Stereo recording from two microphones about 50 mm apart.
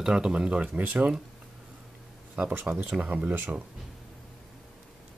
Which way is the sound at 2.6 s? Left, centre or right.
Right.